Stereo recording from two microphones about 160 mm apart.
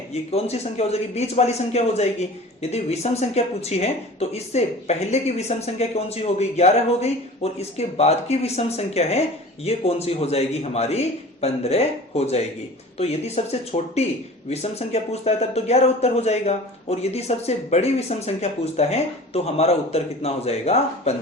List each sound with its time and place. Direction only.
0.1 s speech: 40° left (ahead or behind)